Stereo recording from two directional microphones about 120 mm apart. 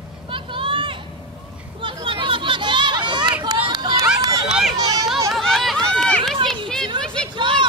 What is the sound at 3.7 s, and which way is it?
Run, 35° right (ahead or behind).